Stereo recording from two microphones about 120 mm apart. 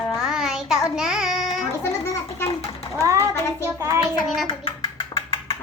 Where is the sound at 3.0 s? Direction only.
25° right (ahead or behind).